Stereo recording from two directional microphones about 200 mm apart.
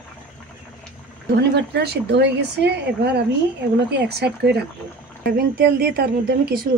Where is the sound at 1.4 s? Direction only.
55° right (ahead or behind).